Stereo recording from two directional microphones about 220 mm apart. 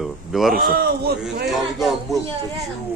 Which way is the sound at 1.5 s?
Centre (ahead or behind).